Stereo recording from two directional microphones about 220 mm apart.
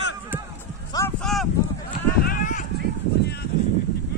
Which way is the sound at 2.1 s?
40° left (ahead or behind).